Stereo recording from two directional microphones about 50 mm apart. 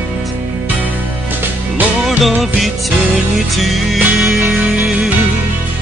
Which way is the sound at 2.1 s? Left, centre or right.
Centre.